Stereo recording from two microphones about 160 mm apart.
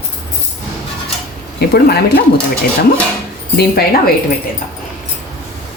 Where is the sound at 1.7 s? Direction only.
75° left (ahead or behind).